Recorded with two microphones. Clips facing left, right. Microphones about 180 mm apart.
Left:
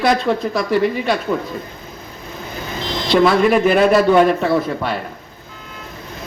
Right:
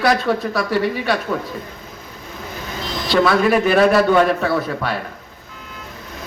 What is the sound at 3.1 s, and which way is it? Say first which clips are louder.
A man's voice: left 2 dB; 10° left (ahead or behind).